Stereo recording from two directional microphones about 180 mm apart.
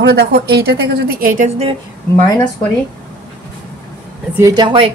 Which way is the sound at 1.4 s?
35° right (ahead or behind).